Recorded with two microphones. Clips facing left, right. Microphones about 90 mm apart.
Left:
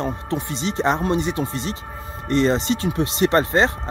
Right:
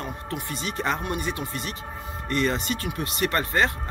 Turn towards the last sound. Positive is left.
turn(degrees=25)  # may be behind; listen again after turning